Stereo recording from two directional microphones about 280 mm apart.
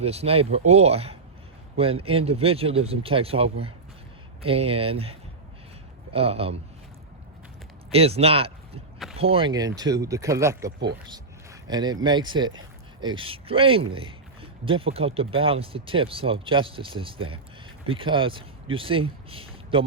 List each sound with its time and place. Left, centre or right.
0.0 s speech: right
6.1 s speech: right
7.9 s speech: right
11.7 s speech: centre
19.3 s a sound: centre